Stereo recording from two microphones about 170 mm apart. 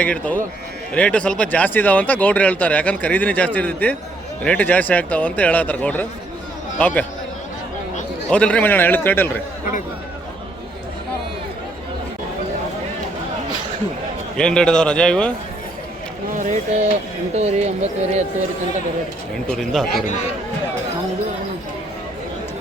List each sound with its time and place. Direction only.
0.0 s a man's voice: 10° left (ahead or behind)
8.3 s speech: 5° left (ahead or behind)
14.3 s a man's voice: 5° left (ahead or behind)
16.4 s speech: 45° right (ahead or behind)
19.5 s a man's voice: centre (ahead or behind)